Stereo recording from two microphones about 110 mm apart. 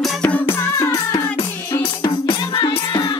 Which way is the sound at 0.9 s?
40° left (ahead or behind).